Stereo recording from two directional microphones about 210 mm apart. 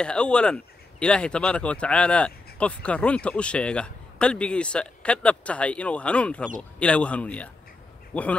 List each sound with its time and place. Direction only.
0.0 s speech: 5° left (ahead or behind)